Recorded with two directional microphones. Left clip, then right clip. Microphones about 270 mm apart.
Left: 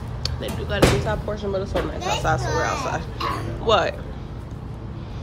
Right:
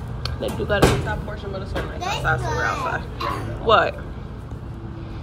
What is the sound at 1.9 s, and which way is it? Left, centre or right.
A child's voice, centre.